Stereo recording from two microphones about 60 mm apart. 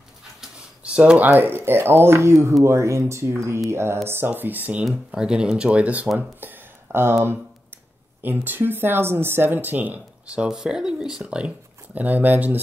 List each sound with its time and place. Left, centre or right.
0.8 s speech: centre; by 2.3 s right
2.3 s speech: right
4.4 s speech: right
5.1 s speech: centre
6.1 s speech: right
8.2 s speech: right
10.2 s speech: centre